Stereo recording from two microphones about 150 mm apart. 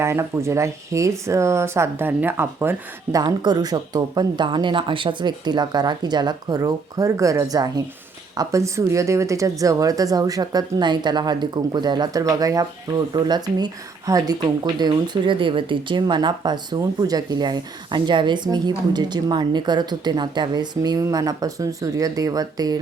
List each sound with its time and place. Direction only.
0.0 s speech: 20° right (ahead or behind)